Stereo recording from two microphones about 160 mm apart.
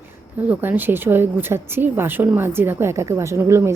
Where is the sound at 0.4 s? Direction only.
10° right (ahead or behind).